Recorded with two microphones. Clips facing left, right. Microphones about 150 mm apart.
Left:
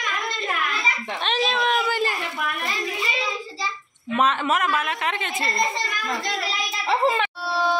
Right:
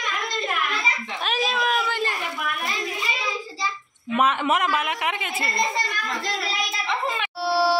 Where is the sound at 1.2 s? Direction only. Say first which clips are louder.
Left 1 dB; 5° right (ahead or behind).